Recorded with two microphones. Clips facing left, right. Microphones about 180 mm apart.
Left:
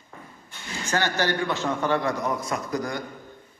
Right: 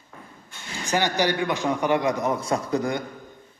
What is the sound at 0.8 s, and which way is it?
A man's voice, 15° right (ahead or behind).